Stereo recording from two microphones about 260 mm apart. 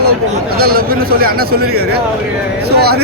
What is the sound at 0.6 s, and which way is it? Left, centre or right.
Speech, right.